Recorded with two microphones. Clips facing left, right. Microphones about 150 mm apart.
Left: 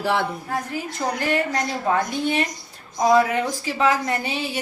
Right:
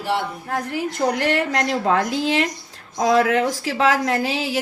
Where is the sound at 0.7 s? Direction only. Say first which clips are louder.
Right 5 dB; 75° right (ahead or behind).